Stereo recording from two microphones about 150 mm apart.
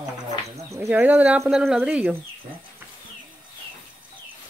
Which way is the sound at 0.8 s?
10° right (ahead or behind).